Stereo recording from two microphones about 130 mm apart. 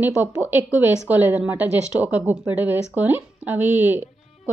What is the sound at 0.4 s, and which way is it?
A woman's voice, 15° right (ahead or behind).